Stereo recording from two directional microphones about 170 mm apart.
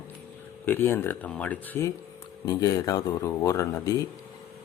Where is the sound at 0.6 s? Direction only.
10° left (ahead or behind).